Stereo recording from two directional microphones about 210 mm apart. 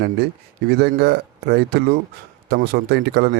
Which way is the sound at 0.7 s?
50° right (ahead or behind).